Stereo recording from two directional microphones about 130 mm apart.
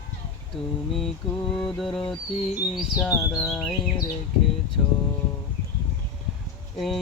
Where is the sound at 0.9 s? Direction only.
Centre (ahead or behind).